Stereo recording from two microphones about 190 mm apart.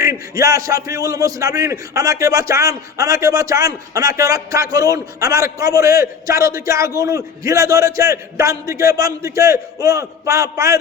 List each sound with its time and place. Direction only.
0.0 s a man's voice: 15° right (ahead or behind)